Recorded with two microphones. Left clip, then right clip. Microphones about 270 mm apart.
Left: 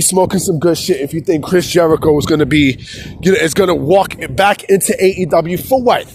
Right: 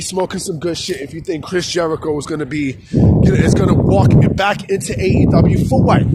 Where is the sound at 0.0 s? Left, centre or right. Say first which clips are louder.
Left 7 dB; left.